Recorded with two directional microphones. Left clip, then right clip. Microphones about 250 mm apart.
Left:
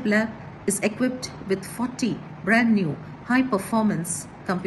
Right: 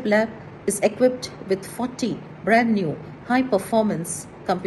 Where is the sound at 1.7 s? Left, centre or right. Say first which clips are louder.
Right 1 dB; right.